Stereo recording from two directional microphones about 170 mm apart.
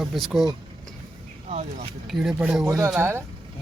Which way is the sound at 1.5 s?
40° right (ahead or behind).